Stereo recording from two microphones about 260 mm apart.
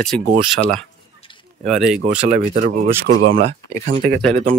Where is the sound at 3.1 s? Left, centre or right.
Right.